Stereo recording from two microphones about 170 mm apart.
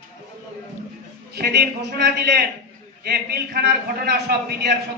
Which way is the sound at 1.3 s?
75° right (ahead or behind).